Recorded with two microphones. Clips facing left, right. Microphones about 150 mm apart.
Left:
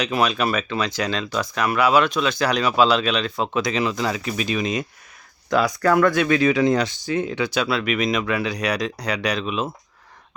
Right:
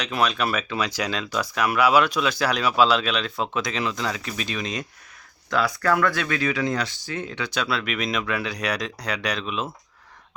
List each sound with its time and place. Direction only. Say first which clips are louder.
0.0 s speech: left 3 dB; centre (ahead or behind)